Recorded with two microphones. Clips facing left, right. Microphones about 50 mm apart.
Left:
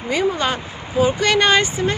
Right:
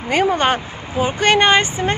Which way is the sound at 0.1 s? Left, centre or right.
Right.